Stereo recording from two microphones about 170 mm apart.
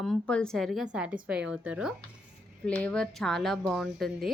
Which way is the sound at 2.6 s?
5° left (ahead or behind).